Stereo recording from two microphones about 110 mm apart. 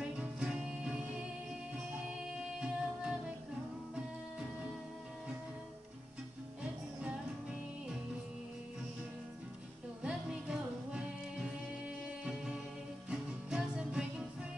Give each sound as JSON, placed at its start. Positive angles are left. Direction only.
{"t": 0.0, "sound": "music", "side_deg": -10}
{"t": 2.3, "sound": "music", "side_deg": -5}
{"t": 6.6, "sound": "music", "side_deg": -10}
{"t": 10.0, "sound": "music", "side_deg": -10}
{"t": 13.1, "sound": "music", "side_deg": -5}